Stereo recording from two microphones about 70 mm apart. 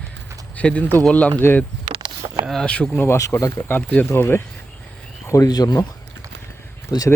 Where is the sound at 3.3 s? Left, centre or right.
Left.